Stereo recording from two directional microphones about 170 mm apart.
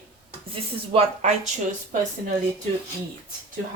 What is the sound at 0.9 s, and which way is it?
Speech, 40° right (ahead or behind).